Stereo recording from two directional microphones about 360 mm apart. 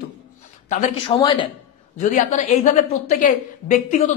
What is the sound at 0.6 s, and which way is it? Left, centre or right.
A woman's voice, left.